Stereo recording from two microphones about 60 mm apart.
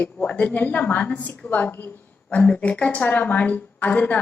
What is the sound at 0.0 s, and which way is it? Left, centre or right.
A woman's voice, left.